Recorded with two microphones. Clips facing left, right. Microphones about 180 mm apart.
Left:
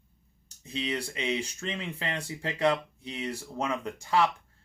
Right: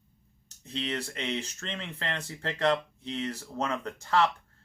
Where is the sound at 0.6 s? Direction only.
10° left (ahead or behind).